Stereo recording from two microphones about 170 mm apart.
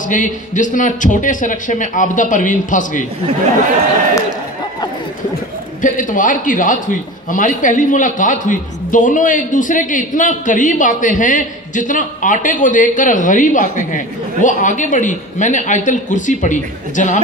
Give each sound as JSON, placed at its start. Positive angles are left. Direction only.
{"t": 0.1, "sound": "a man's voice", "side_deg": 50}
{"t": 5.8, "sound": "a man's voice", "side_deg": 50}